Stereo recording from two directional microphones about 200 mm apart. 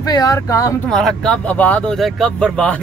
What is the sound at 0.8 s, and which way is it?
Speech, 5° left (ahead or behind).